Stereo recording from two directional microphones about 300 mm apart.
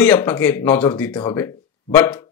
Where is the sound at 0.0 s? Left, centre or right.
Centre.